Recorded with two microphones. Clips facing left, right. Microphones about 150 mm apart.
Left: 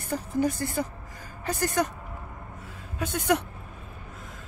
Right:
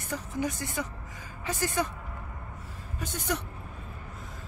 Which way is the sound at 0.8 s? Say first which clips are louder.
Left 4 dB; 40° left (ahead or behind).